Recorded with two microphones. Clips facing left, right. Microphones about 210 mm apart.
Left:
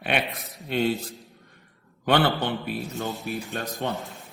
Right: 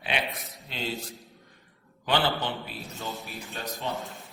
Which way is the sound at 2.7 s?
Centre (ahead or behind).